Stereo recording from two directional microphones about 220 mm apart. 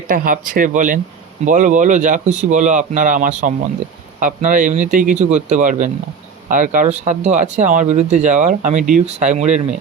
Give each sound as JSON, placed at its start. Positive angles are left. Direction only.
{"t": 0.1, "sound": "speech", "side_deg": -40}